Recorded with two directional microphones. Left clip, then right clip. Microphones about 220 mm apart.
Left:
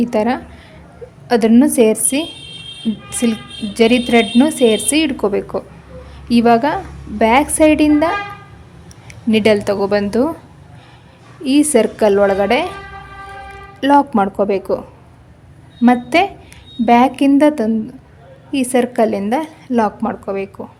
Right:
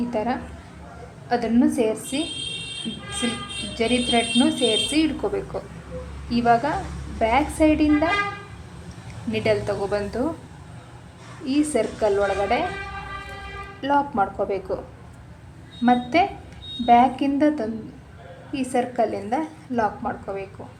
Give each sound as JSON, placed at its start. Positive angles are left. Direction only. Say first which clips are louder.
{"t": 0.1, "sound": "a woman's voice", "louder": "left 8 dB", "side_deg": 45}
{"t": 3.8, "sound": "a woman's voice", "louder": "left 9 dB", "side_deg": 45}
{"t": 9.3, "sound": "a woman's voice", "louder": "left 9 dB", "side_deg": 45}
{"t": 11.4, "sound": "a woman's voice", "louder": "left 9 dB", "side_deg": 45}
{"t": 13.8, "sound": "a woman's voice", "louder": "left 9 dB", "side_deg": 45}
{"t": 15.8, "sound": "a woman's voice", "louder": "left 6 dB", "side_deg": 45}